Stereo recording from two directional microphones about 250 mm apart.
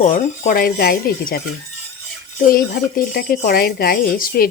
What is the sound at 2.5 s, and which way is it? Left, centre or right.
Speech, left.